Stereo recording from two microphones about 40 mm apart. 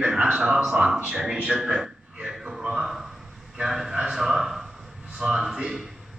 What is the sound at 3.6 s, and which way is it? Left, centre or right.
A man's voice, centre.